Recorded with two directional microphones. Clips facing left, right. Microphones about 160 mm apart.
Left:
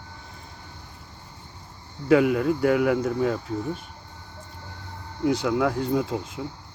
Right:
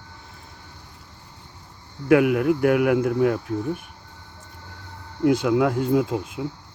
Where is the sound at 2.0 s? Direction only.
10° right (ahead or behind).